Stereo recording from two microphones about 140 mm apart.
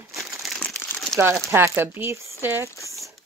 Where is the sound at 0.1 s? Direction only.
Centre (ahead or behind).